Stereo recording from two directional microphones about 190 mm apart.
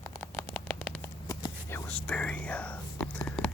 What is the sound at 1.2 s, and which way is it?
Whispering, 20° left (ahead or behind).